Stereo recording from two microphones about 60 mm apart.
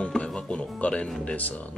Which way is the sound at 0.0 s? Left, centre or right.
Left.